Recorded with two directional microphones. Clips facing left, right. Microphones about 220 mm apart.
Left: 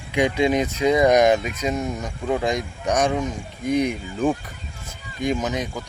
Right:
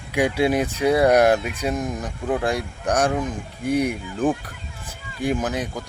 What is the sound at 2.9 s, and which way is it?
Speech, 5° right (ahead or behind).